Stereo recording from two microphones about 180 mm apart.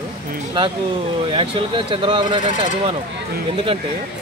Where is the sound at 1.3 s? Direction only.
30° right (ahead or behind).